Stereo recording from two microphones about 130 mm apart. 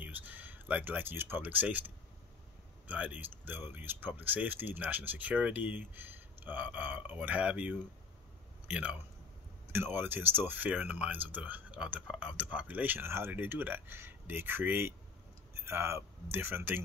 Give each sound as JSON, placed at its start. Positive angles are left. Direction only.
{"t": 0.0, "sound": "speech", "side_deg": -10}
{"t": 2.9, "sound": "speech", "side_deg": -10}